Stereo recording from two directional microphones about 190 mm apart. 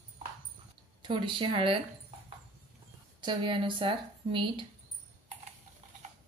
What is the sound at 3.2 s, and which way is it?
A woman's voice, 25° right (ahead or behind).